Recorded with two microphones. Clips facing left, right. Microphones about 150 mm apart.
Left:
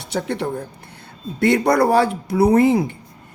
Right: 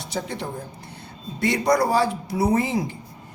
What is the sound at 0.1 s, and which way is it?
Speech, 65° left (ahead or behind).